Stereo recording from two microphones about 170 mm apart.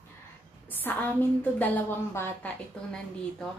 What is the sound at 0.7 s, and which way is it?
Speech, 10° left (ahead or behind).